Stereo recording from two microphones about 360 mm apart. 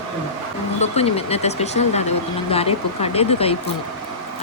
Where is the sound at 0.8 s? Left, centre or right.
Centre.